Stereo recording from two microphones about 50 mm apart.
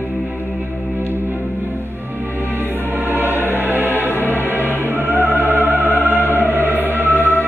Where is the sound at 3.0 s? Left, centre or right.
Right.